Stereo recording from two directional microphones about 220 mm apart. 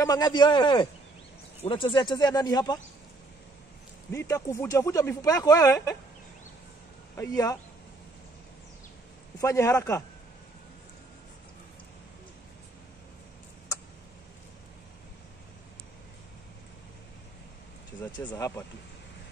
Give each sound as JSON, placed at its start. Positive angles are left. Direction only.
{"t": 0.0, "sound": "speech", "side_deg": 15}
{"t": 4.1, "sound": "speech", "side_deg": 15}
{"t": 7.2, "sound": "speech", "side_deg": 15}
{"t": 9.4, "sound": "speech", "side_deg": 15}
{"t": 18.2, "sound": "speech", "side_deg": 10}